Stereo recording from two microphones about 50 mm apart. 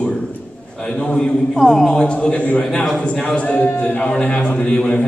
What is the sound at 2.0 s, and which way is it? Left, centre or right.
Speech, left.